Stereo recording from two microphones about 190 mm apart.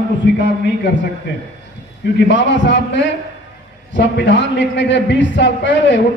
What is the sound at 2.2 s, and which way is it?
A man's voice, 70° left (ahead or behind).